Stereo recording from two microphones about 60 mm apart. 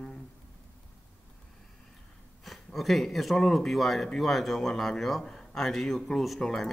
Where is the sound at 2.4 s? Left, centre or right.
Centre.